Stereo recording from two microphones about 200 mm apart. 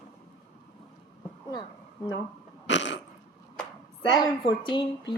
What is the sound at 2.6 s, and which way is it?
Dog, 65° left (ahead or behind).